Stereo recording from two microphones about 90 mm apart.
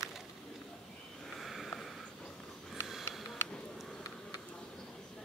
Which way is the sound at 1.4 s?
Centre (ahead or behind).